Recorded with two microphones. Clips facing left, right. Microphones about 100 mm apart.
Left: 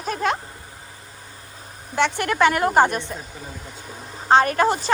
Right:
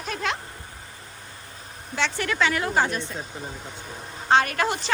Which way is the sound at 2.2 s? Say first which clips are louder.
Left 6 dB; 50° left (ahead or behind).